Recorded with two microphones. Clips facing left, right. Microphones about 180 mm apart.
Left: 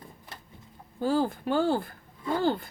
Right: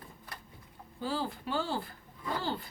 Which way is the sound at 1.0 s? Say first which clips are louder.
Left 9 dB; 50° left (ahead or behind).